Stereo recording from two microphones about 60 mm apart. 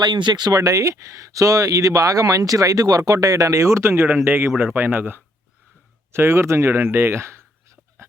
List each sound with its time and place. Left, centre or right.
0.5 s speech: right
4.0 s speech: right
6.1 s speech: right